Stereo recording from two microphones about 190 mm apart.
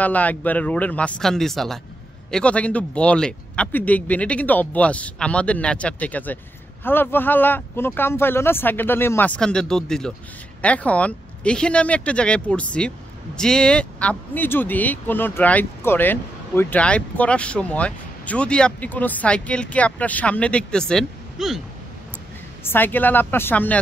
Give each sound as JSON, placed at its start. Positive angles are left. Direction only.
{"t": 0.0, "sound": "speech", "side_deg": 10}
{"t": 22.6, "sound": "speech", "side_deg": 10}